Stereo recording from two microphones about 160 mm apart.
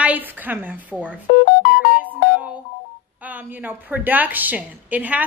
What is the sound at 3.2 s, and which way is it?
A woman's voice, 10° right (ahead or behind).